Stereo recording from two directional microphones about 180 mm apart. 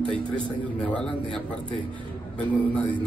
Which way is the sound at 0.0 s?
30° right (ahead or behind).